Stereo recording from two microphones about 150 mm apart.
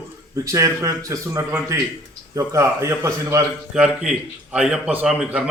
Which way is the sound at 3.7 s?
5° right (ahead or behind).